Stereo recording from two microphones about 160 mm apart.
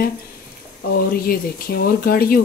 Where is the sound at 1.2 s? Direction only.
65° left (ahead or behind).